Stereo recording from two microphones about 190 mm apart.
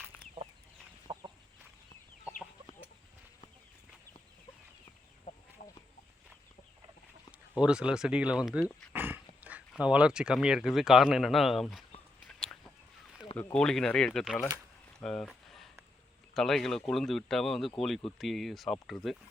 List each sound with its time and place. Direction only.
1.0 s chicken: 20° right (ahead or behind)
5.6 s chicken: 45° left (ahead or behind)
7.3 s speech: 5° right (ahead or behind)
8.9 s dog: 10° right (ahead or behind)
9.4 s speech: 5° right (ahead or behind)
13.3 s speech: 5° left (ahead or behind)
15.0 s a sound: 5° left (ahead or behind)
16.3 s speech: centre (ahead or behind)